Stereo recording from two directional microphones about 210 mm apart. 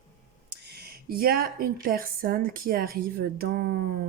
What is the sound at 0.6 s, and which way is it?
Speech, 50° right (ahead or behind).